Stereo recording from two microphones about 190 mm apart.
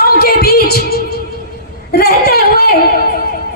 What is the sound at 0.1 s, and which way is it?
Music, 55° left (ahead or behind).